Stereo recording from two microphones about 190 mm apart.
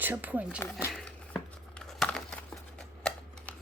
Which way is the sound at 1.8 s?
5° left (ahead or behind).